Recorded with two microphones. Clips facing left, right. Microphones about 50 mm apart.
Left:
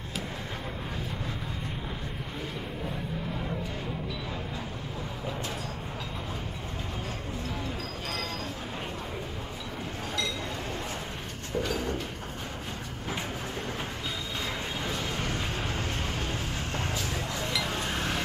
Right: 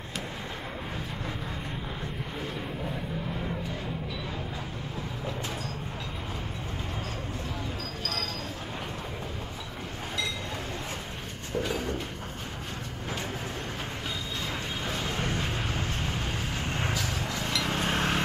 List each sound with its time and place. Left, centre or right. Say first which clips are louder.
11.5 s a sound: even; centre
14.9 s vehicle: right 3 dB; centre
17.8 s vehicle: right 4 dB; right